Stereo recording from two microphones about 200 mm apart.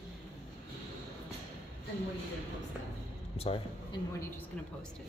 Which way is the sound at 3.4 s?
25° left (ahead or behind).